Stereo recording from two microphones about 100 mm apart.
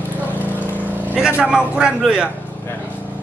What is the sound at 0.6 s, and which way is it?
Vehicle, 15° right (ahead or behind).